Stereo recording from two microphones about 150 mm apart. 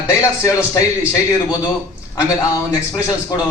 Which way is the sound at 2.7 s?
20° left (ahead or behind).